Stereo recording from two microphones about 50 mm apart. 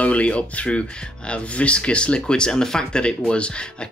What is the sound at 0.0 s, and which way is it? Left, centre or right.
Speech, left.